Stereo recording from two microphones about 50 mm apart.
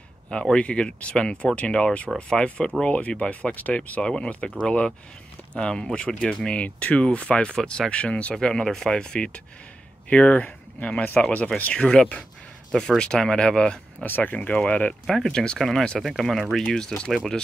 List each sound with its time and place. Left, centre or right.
0.3 s speech: centre
4.0 s speech: centre
5.9 s speech: left
11.7 s speech: centre
14.0 s speech: left
15.0 s speech: centre